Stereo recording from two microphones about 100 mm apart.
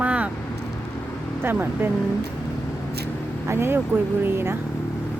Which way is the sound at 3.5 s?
25° right (ahead or behind).